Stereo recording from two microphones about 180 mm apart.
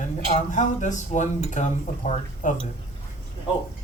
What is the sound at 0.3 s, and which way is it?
Speech, 45° left (ahead or behind).